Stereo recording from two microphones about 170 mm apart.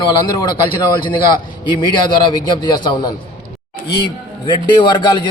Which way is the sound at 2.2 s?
25° left (ahead or behind).